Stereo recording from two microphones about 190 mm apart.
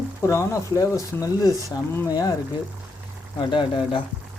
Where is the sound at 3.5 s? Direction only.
25° left (ahead or behind).